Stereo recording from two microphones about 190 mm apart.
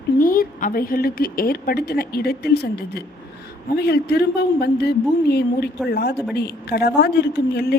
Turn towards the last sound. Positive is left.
turn(degrees=60)  # may be behind; listen again after turning